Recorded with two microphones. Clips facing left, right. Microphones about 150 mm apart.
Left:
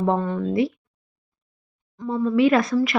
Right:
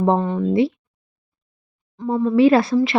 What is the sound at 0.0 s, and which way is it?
Speech, 25° right (ahead or behind).